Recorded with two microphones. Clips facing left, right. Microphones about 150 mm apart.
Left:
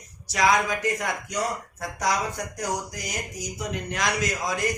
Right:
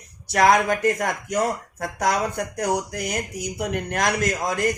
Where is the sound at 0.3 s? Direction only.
55° right (ahead or behind).